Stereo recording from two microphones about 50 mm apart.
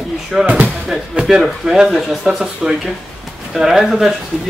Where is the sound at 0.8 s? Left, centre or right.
Centre.